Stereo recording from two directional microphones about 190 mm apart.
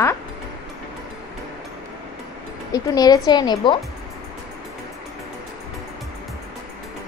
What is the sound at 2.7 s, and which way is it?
A woman's voice, 20° left (ahead or behind).